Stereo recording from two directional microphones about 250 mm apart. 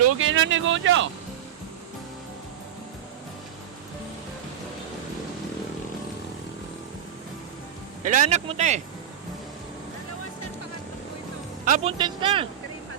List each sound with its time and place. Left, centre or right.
0.0 s speech: right
8.0 s speech: right
11.6 s speech: right